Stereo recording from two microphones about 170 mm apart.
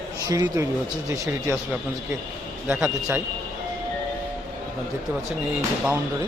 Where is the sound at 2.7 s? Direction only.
10° right (ahead or behind).